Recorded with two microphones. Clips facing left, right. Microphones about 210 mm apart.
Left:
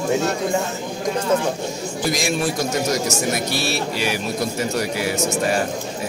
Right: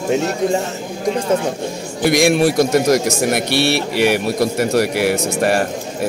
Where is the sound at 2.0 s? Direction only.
65° right (ahead or behind).